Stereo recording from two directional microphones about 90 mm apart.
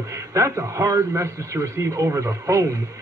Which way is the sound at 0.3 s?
35° right (ahead or behind).